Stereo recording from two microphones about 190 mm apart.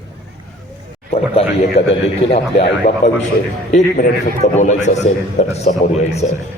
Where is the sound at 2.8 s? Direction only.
40° left (ahead or behind).